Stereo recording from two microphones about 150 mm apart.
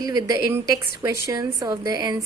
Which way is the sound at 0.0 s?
25° right (ahead or behind).